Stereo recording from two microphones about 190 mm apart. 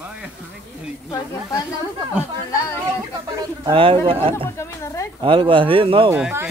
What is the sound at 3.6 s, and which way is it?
Speech, 30° right (ahead or behind).